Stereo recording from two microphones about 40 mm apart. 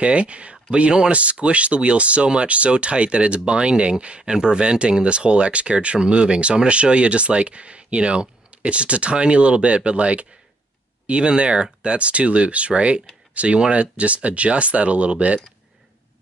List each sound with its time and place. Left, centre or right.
0.0 s speech: right